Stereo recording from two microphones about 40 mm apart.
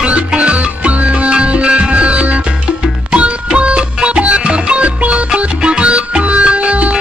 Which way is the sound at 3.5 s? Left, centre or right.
Right.